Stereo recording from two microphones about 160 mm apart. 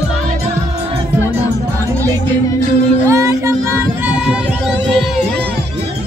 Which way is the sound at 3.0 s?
20° right (ahead or behind).